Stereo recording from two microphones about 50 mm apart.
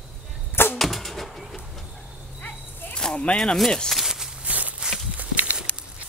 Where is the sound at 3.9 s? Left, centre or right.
Centre.